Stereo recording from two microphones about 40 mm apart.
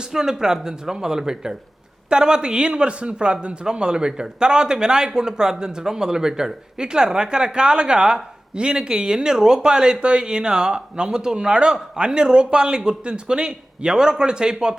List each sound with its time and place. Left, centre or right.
0.1 s a man's voice: centre